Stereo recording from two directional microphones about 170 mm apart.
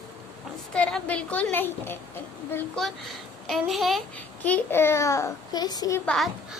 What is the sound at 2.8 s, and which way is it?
Speech, centre (ahead or behind).